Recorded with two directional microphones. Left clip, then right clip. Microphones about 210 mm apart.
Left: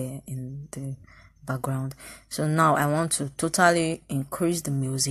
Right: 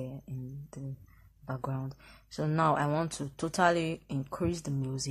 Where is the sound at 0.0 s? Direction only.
15° left (ahead or behind).